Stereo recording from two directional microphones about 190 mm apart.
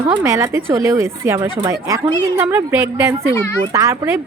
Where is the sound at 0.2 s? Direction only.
15° right (ahead or behind).